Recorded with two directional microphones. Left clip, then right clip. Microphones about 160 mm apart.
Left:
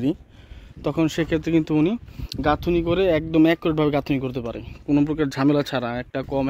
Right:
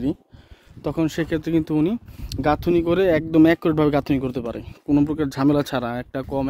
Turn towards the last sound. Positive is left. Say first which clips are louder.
# left 1 dB
turn(degrees=-45)  # may be behind; listen again after turning